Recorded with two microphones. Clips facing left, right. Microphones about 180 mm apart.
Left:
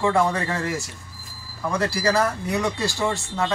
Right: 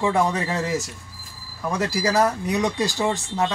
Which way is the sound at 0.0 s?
20° right (ahead or behind).